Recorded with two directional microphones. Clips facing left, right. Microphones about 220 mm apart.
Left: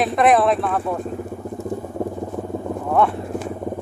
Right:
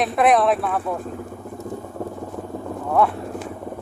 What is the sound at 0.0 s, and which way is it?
Speech, centre (ahead or behind).